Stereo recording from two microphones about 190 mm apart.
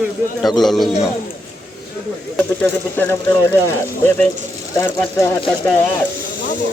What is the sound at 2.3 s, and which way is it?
Speech, 10° left (ahead or behind).